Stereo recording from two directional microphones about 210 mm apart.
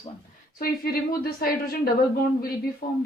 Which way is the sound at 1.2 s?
45° left (ahead or behind).